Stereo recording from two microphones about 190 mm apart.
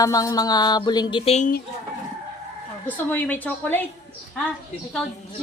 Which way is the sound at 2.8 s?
10° left (ahead or behind).